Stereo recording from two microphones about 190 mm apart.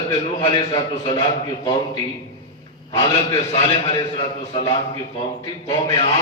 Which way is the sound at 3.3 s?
30° left (ahead or behind).